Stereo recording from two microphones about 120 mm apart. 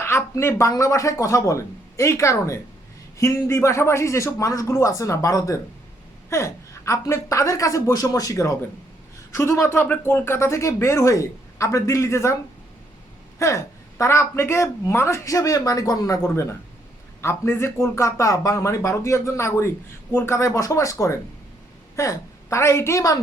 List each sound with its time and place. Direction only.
0.0 s a woman's voice: 20° left (ahead or behind)
13.4 s a woman's voice: 25° left (ahead or behind)